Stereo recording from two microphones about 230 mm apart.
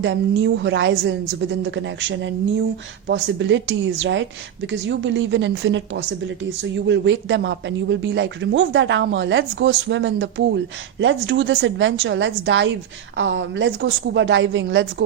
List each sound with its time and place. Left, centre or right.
0.0 s speech: right